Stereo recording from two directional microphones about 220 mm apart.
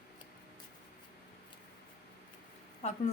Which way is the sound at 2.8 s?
30° left (ahead or behind).